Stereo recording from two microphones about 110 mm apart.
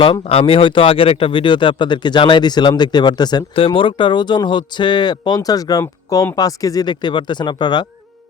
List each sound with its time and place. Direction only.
0.0 s speech: 50° left (ahead or behind)